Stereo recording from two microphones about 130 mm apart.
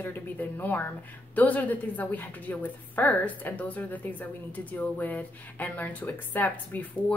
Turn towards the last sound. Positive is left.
turn(degrees=15)  # may be behind; listen again after turning